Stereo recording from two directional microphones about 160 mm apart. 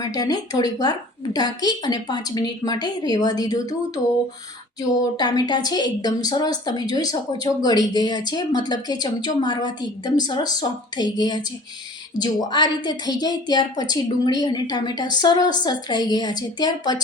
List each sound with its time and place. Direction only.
0.0 s a woman's voice: 25° left (ahead or behind)